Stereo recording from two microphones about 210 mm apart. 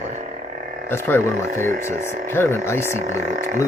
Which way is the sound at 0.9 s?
10° left (ahead or behind).